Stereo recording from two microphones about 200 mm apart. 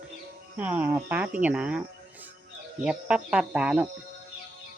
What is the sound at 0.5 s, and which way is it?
Speech, 10° right (ahead or behind).